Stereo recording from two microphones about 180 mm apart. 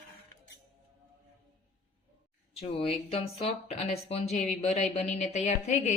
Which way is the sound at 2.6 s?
35° left (ahead or behind).